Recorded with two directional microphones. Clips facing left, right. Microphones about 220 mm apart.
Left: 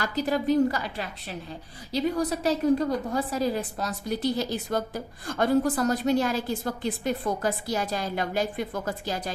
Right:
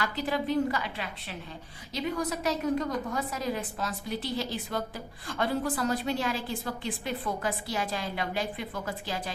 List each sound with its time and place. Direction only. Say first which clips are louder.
0.0 s a woman's voice: left 4 dB; 40° left (ahead or behind)